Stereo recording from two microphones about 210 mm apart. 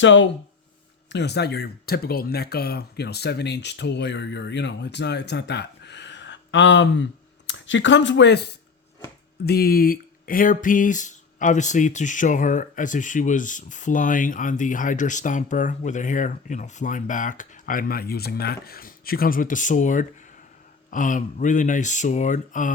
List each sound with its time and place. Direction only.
0.0 s speech: 60° left (ahead or behind)
9.5 s speech: 50° left (ahead or behind)